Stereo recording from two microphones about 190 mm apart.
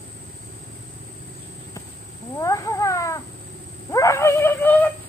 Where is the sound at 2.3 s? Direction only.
15° left (ahead or behind).